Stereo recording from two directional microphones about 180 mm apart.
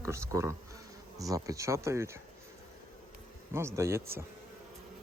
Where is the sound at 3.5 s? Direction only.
15° right (ahead or behind).